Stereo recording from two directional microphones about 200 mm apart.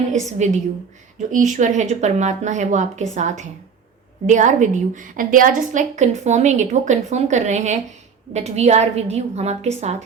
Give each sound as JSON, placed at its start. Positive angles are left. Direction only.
{"t": 0.1, "sound": "a woman's voice", "side_deg": -35}